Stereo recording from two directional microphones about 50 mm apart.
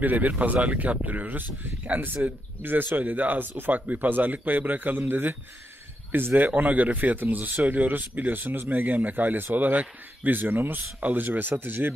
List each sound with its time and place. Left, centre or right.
0.0 s speech: right